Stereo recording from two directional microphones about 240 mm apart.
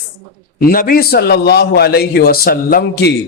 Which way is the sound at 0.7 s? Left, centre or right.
Left.